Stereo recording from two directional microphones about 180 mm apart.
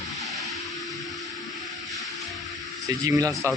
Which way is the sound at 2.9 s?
20° right (ahead or behind).